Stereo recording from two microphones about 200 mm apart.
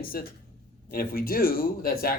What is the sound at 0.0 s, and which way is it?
Speech, 45° left (ahead or behind).